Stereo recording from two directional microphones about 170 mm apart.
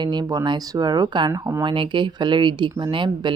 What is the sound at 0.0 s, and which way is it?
Speech, 25° right (ahead or behind).